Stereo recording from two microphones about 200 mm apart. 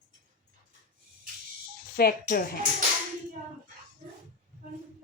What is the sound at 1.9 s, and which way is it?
Speech, 50° left (ahead or behind).